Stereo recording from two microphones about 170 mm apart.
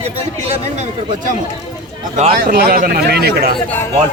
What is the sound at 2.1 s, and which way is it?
Speech, 45° right (ahead or behind).